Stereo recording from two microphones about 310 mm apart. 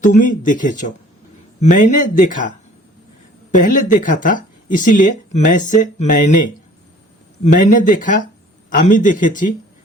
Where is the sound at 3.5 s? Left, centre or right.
Left.